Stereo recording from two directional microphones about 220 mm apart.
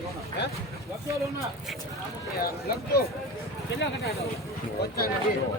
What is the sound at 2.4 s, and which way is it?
Speech, 45° left (ahead or behind).